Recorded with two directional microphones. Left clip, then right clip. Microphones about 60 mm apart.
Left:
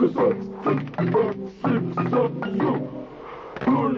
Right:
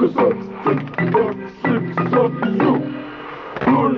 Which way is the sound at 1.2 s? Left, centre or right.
Right.